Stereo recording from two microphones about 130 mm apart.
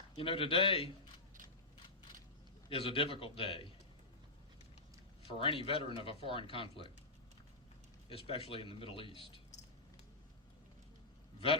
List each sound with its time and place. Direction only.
0.2 s speech: 45° left (ahead or behind)
2.6 s speech: 45° left (ahead or behind)
5.4 s speech: 45° left (ahead or behind)
8.1 s speech: 45° left (ahead or behind)